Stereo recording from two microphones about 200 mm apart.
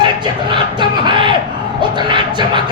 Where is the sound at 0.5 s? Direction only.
25° right (ahead or behind).